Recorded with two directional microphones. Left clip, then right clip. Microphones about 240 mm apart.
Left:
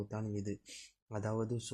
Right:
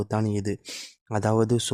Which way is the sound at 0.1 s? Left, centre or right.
Right.